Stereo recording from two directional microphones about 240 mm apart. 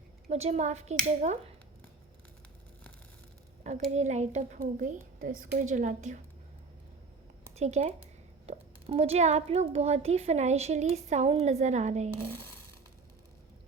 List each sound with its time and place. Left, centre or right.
0.3 s speech: right
3.6 s a woman's voice: right
7.5 s speech: right